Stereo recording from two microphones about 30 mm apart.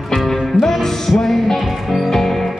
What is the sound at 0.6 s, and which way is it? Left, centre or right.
Music, centre.